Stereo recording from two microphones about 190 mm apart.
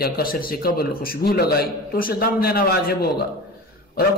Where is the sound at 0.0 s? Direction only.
50° left (ahead or behind).